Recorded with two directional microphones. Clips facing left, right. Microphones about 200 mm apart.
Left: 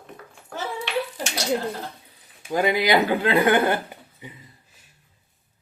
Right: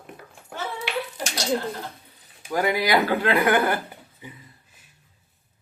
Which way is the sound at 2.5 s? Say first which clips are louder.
Left 2 dB; 20° left (ahead or behind).